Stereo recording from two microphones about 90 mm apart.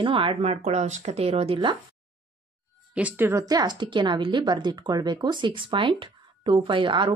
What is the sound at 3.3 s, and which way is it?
Speech, 45° right (ahead or behind).